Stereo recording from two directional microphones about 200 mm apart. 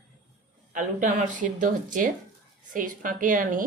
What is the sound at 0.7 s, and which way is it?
A woman's voice, 40° right (ahead or behind).